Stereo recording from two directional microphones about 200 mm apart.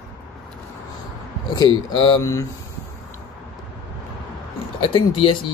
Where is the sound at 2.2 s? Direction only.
15° left (ahead or behind).